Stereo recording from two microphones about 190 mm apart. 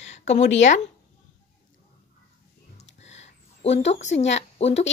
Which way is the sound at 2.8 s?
35° left (ahead or behind).